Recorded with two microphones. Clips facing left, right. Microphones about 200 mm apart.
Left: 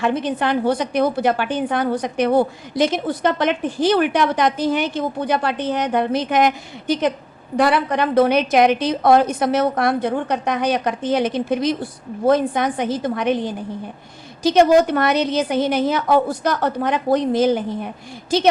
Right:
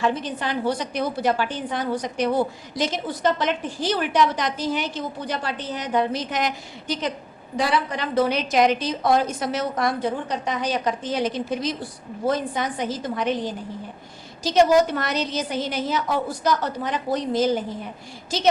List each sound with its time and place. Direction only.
0.0 s a woman's voice: 60° left (ahead or behind)